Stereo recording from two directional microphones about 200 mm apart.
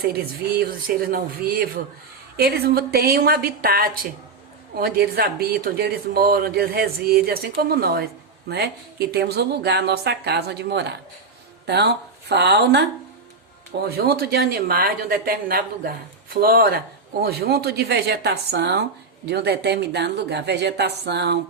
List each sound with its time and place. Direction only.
0.6 s speech: 45° right (ahead or behind)